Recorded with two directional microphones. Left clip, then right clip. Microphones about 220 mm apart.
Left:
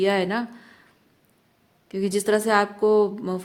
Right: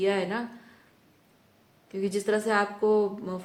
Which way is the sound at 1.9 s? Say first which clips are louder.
Left 5 dB; 50° left (ahead or behind).